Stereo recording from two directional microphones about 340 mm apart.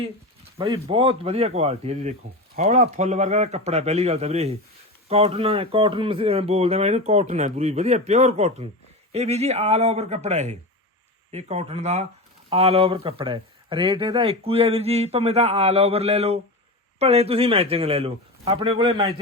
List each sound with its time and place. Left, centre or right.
0.6 s speech: centre